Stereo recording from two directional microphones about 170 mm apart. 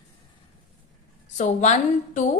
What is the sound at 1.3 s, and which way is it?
Speech, 45° left (ahead or behind).